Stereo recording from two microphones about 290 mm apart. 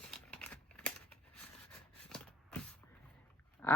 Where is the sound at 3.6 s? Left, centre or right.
Centre.